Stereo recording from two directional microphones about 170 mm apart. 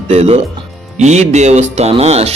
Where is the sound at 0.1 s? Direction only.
40° right (ahead or behind).